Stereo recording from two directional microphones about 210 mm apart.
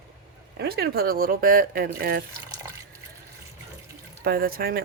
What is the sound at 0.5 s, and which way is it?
Speech, 50° right (ahead or behind).